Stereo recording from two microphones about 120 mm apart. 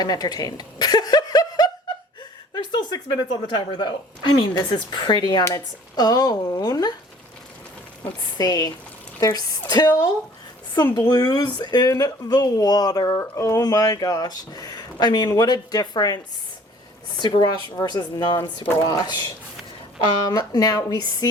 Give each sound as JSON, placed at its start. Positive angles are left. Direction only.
{"t": 0.0, "sound": "a sound", "side_deg": 35}
{"t": 2.5, "sound": "speech", "side_deg": 35}
{"t": 8.4, "sound": "speech", "side_deg": 35}